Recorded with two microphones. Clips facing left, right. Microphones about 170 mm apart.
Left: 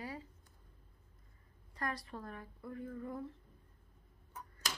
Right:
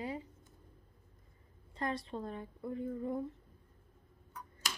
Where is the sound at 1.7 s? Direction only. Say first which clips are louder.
Right 4 dB; 25° right (ahead or behind).